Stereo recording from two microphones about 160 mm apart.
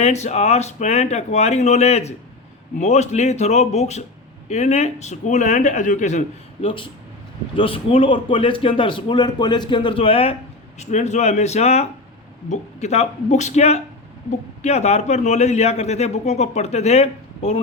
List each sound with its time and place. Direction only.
0.0 s a man's voice: 45° left (ahead or behind)
6.7 s a man's voice: 35° left (ahead or behind)
10.8 s a man's voice: 45° left (ahead or behind)